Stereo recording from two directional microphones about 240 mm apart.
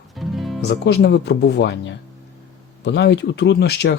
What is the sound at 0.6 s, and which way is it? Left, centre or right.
Speech, left.